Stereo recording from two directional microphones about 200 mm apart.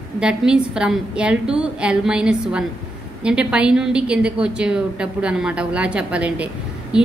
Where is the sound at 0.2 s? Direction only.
5° right (ahead or behind).